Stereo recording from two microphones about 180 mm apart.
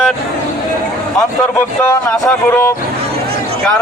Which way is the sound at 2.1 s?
5° left (ahead or behind).